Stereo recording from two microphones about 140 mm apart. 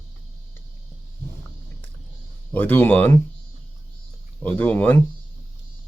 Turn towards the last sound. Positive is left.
turn(degrees=15)  # may be behind; listen again after turning